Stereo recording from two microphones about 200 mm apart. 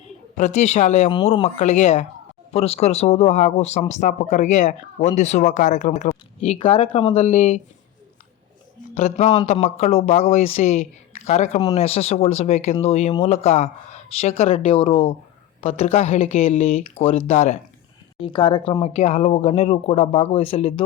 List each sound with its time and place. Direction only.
0.3 s speech: 35° left (ahead or behind)
1.1 s speech: 20° left (ahead or behind)
1.5 s speech: 35° left (ahead or behind)
6.6 s speech: 25° left (ahead or behind)
9.0 s speech: 35° left (ahead or behind)
18.2 s speech: 25° left (ahead or behind)